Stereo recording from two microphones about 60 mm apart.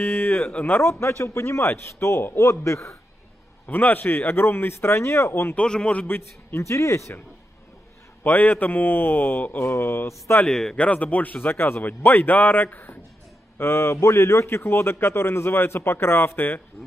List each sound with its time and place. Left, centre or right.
0.0 s speech: left
0.7 s a man's voice: left
3.6 s a man's voice: left
5.6 s a man's voice: centre
6.0 s a man's voice: left
6.6 s a man's voice: left
8.2 s a man's voice: left
10.4 s a man's voice: centre
10.8 s a man's voice: left
11.5 s a man's voice: left
13.6 s a man's voice: left